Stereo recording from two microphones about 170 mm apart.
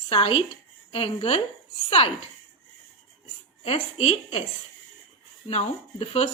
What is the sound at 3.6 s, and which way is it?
Speech, 35° left (ahead or behind).